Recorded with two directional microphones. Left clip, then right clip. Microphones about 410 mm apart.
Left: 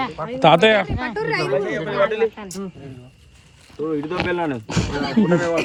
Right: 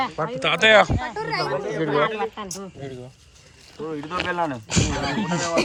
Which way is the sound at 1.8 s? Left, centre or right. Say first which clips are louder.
Even; right.